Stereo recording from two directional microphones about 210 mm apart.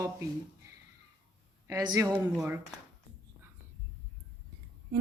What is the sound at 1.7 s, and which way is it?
Speech, 15° right (ahead or behind).